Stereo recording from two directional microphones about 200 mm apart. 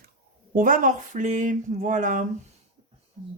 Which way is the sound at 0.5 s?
40° right (ahead or behind).